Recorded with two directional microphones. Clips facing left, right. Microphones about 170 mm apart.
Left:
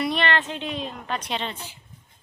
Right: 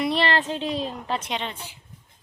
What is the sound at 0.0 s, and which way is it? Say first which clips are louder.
A woman's voice: right 1 dB; 30° right (ahead or behind).